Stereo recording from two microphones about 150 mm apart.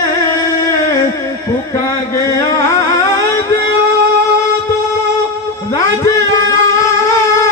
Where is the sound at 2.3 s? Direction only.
20° left (ahead or behind).